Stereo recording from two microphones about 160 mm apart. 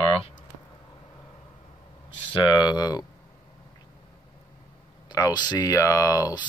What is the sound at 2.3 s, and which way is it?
Speech, 25° left (ahead or behind).